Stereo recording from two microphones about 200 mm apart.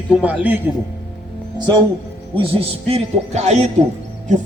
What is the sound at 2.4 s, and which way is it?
A man's voice, 25° right (ahead or behind).